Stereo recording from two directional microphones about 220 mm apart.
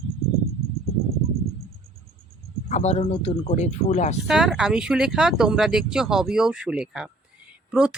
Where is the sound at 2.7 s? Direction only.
30° left (ahead or behind).